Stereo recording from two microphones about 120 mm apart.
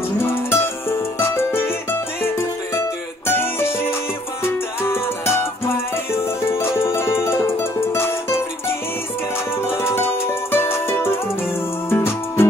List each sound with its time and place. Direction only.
0.2 s music: 20° left (ahead or behind)
9.6 s music: 20° left (ahead or behind)